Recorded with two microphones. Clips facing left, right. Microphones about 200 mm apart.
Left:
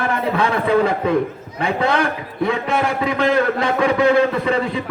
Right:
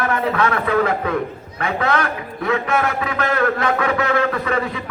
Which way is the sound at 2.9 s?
30° left (ahead or behind).